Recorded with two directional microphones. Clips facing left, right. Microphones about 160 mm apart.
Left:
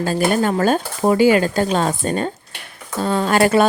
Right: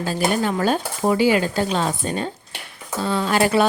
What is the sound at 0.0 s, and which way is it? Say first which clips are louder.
A woman's voice: left 4 dB; 50° left (ahead or behind).